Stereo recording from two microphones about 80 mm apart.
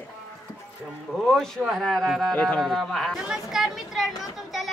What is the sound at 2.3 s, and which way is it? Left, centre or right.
Child singing, centre.